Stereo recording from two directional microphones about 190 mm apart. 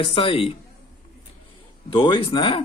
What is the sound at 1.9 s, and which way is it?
Speech, 25° left (ahead or behind).